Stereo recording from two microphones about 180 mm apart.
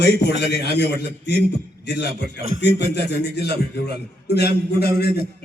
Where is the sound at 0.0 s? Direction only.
65° left (ahead or behind).